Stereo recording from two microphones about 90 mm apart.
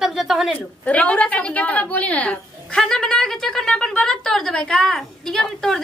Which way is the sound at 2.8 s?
5° left (ahead or behind).